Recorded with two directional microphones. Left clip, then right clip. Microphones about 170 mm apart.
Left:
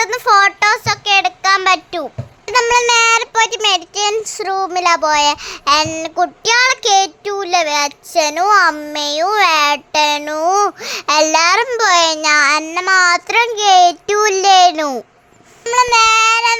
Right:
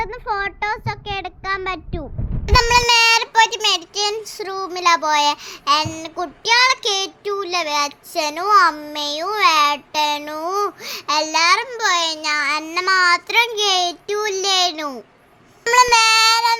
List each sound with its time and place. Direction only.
0.0 s child singing: 25° left (ahead or behind)
2.5 s a child's voice: 15° left (ahead or behind); by 15.0 s 40° left (ahead or behind)
15.6 s child singing: 5° left (ahead or behind)